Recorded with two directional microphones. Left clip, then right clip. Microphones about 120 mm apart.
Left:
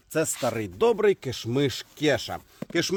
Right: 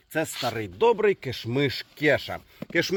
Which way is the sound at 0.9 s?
50° left (ahead or behind).